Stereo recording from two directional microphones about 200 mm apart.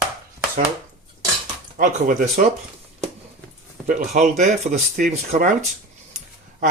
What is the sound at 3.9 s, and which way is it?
Speech, 35° right (ahead or behind).